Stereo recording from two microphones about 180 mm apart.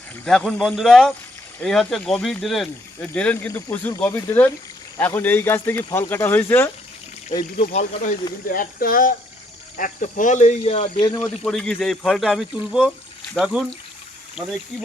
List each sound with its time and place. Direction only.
0.3 s speech: 5° left (ahead or behind)
7.6 s speech: 45° left (ahead or behind)
11.2 s speech: centre (ahead or behind)